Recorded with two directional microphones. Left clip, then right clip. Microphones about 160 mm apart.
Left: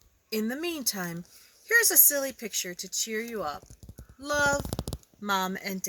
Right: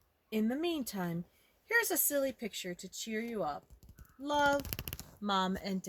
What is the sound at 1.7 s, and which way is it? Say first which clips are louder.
Speech: left 8 dB; 20° right (ahead or behind).